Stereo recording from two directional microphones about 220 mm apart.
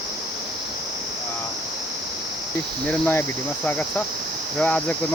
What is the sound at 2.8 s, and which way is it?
Speech, 5° left (ahead or behind).